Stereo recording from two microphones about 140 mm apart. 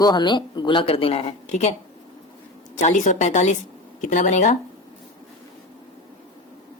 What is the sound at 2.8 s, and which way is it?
Speech, 60° left (ahead or behind).